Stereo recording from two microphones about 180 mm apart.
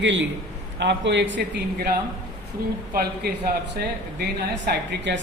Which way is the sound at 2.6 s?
55° right (ahead or behind).